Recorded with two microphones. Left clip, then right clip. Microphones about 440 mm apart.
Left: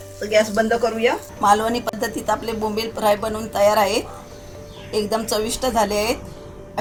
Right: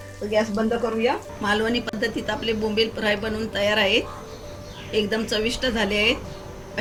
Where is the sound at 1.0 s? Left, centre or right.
Centre.